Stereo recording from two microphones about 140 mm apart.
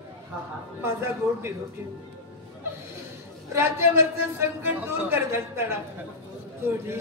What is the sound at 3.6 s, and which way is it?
A man's voice, 20° right (ahead or behind).